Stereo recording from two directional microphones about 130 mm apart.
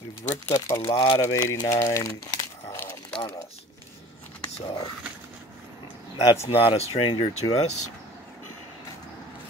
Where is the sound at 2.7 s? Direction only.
15° left (ahead or behind).